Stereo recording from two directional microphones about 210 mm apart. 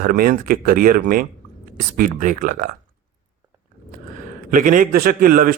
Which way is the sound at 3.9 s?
40° right (ahead or behind).